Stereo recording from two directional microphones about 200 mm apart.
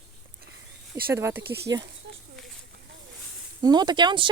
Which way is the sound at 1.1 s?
10° right (ahead or behind).